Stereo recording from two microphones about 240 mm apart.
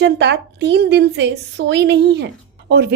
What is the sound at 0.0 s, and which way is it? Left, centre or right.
A woman's voice, right.